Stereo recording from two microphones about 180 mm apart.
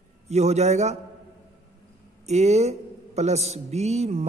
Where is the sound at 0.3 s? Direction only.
35° right (ahead or behind).